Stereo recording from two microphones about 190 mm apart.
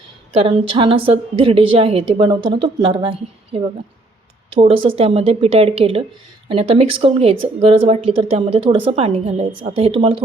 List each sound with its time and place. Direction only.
0.4 s a woman's voice: 30° right (ahead or behind)